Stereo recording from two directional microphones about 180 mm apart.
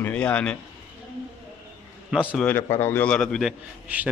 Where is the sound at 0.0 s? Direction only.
10° left (ahead or behind).